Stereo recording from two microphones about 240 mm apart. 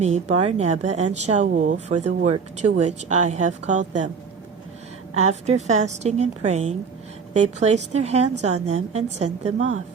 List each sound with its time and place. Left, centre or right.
0.0 s a woman's voice: right
5.1 s a woman's voice: right